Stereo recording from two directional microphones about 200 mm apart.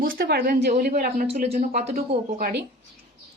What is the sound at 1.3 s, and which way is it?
A woman's voice, 30° right (ahead or behind).